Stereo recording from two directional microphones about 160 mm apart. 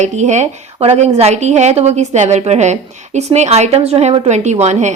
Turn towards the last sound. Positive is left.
turn(degrees=-45)  # may be behind; listen again after turning